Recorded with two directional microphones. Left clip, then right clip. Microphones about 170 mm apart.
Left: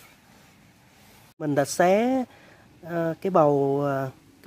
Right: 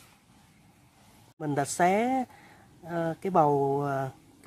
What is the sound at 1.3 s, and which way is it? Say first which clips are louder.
Speech: left 5 dB; 30° left (ahead or behind).